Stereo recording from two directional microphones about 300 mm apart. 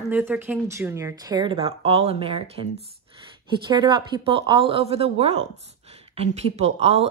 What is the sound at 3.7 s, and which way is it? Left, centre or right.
Speech, centre.